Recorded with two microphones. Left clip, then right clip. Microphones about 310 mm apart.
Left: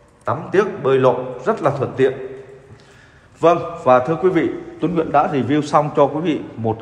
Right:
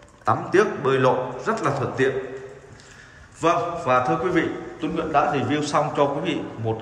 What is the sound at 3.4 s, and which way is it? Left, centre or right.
A man's voice, centre.